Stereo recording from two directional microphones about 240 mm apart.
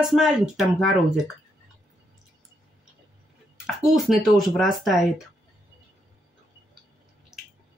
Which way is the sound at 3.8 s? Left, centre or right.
Centre.